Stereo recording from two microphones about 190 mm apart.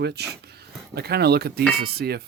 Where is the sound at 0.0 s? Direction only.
60° right (ahead or behind).